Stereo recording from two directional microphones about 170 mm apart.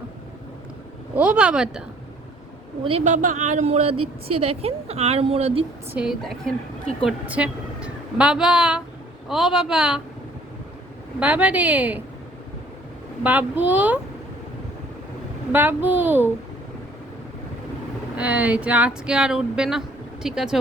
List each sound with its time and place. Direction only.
1.1 s a woman's voice: 5° right (ahead or behind)
2.8 s a woman's voice: 40° right (ahead or behind)
5.9 s a woman's voice: 5° right (ahead or behind)
11.2 s a woman's voice: 10° right (ahead or behind)
13.2 s a woman's voice: 10° right (ahead or behind)
15.5 s a woman's voice: 10° right (ahead or behind)
18.2 s a woman's voice: 10° right (ahead or behind)